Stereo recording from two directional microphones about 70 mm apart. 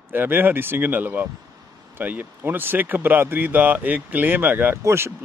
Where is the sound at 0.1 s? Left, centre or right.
Right.